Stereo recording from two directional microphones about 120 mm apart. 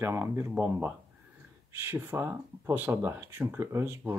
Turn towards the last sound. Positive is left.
turn(degrees=-20)  # may be behind; listen again after turning